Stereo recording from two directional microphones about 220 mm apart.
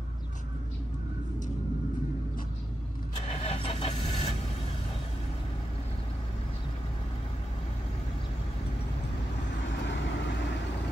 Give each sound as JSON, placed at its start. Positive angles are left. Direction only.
{"t": 3.3, "sound": "vehicle", "side_deg": 25}
{"t": 9.7, "sound": "vehicle", "side_deg": 55}